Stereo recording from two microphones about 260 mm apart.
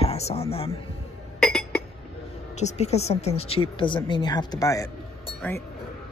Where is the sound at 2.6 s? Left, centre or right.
Left; by 5.6 s centre.